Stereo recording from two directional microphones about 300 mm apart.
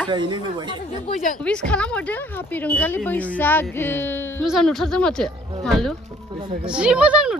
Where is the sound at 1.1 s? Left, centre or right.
Left.